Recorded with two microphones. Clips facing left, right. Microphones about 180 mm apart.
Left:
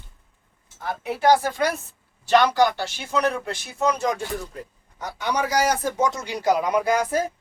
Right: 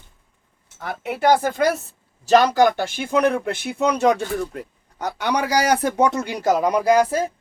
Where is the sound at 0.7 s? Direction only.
65° right (ahead or behind); by 7.1 s 35° right (ahead or behind).